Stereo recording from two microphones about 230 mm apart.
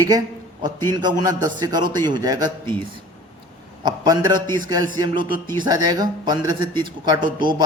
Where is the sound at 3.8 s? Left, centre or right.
Centre.